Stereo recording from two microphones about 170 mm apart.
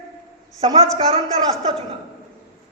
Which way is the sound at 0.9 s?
35° right (ahead or behind).